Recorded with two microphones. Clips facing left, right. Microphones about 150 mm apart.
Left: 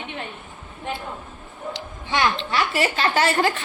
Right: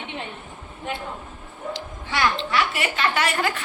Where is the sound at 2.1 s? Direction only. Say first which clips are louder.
Left 1 dB; 20° left (ahead or behind).